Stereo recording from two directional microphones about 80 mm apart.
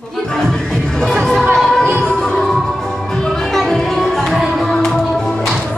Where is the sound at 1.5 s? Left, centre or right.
Centre.